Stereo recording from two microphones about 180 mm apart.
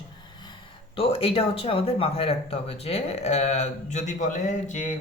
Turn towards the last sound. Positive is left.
turn(degrees=45)  # may be behind; listen again after turning